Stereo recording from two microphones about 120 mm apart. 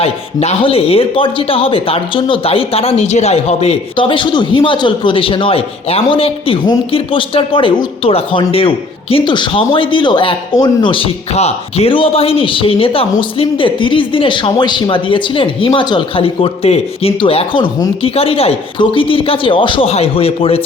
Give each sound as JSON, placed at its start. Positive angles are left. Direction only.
{"t": 0.0, "sound": "speech", "side_deg": 55}
{"t": 3.9, "sound": "speech", "side_deg": 45}